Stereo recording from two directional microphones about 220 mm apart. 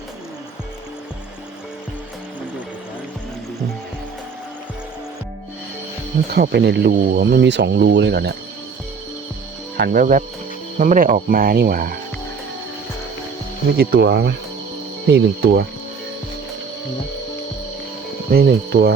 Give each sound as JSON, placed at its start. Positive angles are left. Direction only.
{"t": 6.3, "sound": "speech", "side_deg": -45}
{"t": 9.7, "sound": "speech", "side_deg": -45}
{"t": 13.7, "sound": "speech", "side_deg": -45}
{"t": 18.3, "sound": "speech", "side_deg": -45}